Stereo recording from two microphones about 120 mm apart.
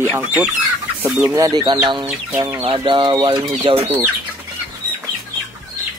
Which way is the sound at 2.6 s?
45° right (ahead or behind).